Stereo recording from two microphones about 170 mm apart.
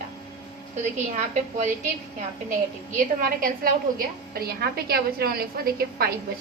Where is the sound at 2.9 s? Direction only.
55° right (ahead or behind).